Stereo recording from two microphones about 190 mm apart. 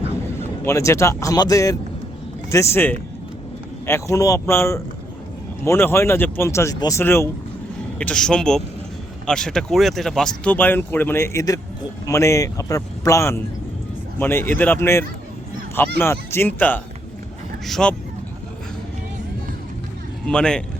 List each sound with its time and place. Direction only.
0.6 s speech: 15° left (ahead or behind)
20.2 s speech: 5° left (ahead or behind)